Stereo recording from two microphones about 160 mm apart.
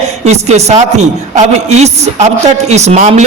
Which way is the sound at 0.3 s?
45° right (ahead or behind).